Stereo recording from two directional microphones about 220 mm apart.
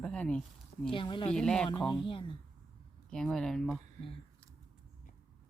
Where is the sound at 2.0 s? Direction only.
25° left (ahead or behind).